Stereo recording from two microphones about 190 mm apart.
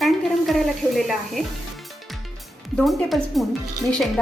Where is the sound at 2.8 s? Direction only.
Centre (ahead or behind).